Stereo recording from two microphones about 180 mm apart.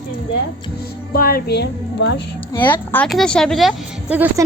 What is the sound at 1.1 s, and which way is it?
Speech, 55° left (ahead or behind).